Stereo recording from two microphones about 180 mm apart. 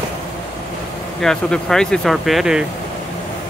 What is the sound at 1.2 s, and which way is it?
Speech, 5° left (ahead or behind).